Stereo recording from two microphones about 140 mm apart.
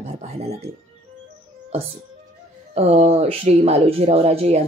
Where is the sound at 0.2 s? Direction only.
50° right (ahead or behind).